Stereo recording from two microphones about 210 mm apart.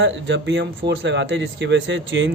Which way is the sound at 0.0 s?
60° right (ahead or behind).